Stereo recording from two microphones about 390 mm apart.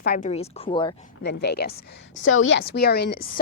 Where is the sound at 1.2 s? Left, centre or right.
Left.